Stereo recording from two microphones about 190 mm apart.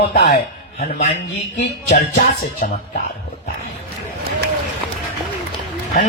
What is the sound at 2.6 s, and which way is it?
Speech, 45° left (ahead or behind).